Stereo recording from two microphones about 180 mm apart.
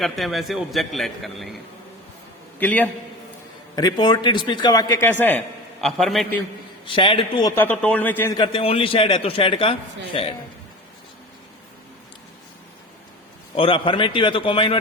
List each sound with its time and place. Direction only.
0.0 s a man's voice: centre (ahead or behind)
2.6 s a man's voice: 10° left (ahead or behind)
3.8 s a man's voice: 20° left (ahead or behind); by 6.4 s centre (ahead or behind)
6.8 s a man's voice: 30° left (ahead or behind)
7.5 s a man's voice: 10° left (ahead or behind)
8.4 s a man's voice: 30° left (ahead or behind)
13.6 s a man's voice: 30° left (ahead or behind)